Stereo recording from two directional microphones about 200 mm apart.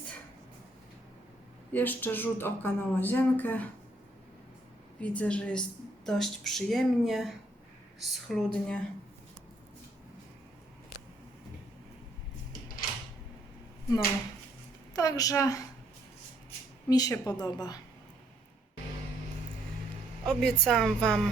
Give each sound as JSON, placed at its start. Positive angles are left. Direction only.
{"t": 1.7, "sound": "speech", "side_deg": 10}
{"t": 4.9, "sound": "speech", "side_deg": 5}
{"t": 14.9, "sound": "speech", "side_deg": 20}
{"t": 16.9, "sound": "a woman's voice", "side_deg": 20}
{"t": 20.2, "sound": "speech", "side_deg": 0}